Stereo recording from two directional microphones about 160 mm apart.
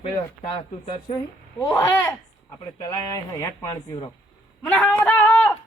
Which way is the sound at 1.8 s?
20° left (ahead or behind).